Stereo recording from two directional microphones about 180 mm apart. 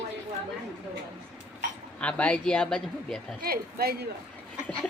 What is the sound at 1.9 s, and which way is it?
Speech, 5° left (ahead or behind).